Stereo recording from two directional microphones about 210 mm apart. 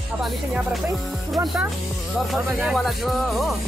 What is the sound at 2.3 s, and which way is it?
Speech, centre (ahead or behind).